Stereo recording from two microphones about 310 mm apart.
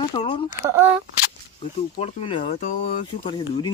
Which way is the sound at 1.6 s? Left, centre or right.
Centre.